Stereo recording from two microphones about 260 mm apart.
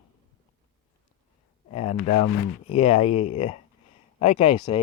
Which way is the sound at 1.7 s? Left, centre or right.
Left.